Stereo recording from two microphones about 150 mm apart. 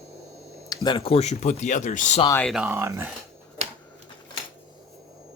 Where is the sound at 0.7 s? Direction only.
30° left (ahead or behind); by 2.2 s 55° left (ahead or behind).